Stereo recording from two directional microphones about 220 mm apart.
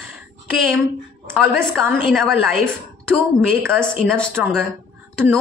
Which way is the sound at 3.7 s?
5° left (ahead or behind).